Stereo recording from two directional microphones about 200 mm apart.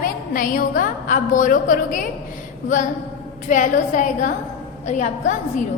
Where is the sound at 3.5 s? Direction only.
40° left (ahead or behind).